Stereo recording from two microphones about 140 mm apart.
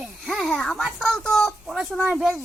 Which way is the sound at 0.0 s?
Centre (ahead or behind).